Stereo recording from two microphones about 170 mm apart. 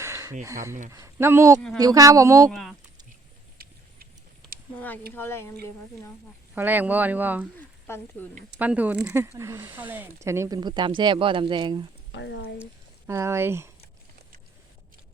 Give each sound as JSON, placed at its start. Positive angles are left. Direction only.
{"t": 0.0, "sound": "a sound", "side_deg": -20}
{"t": 0.4, "sound": "speech", "side_deg": -15}
{"t": 2.5, "sound": "speech", "side_deg": 0}
{"t": 5.1, "sound": "speech", "side_deg": 15}
{"t": 6.5, "sound": "speech", "side_deg": -10}
{"t": 7.9, "sound": "speech", "side_deg": 15}
{"t": 8.5, "sound": "speech", "side_deg": -10}
{"t": 12.1, "sound": "speech", "side_deg": 90}
{"t": 13.1, "sound": "speech", "side_deg": -15}